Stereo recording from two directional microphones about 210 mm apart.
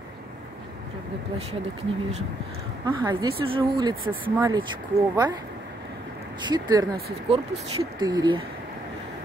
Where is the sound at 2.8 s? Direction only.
20° right (ahead or behind).